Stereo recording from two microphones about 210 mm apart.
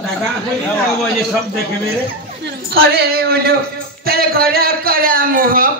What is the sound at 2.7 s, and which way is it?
A man's voice, 45° right (ahead or behind).